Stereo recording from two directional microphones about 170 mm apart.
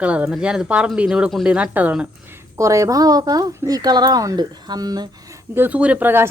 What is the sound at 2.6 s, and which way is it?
A woman's voice, 20° right (ahead or behind).